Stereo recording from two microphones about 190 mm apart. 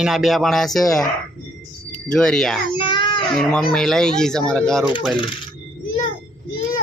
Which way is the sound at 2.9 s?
25° left (ahead or behind).